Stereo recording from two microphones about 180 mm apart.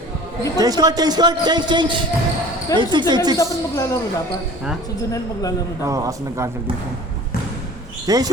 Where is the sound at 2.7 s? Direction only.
20° left (ahead or behind).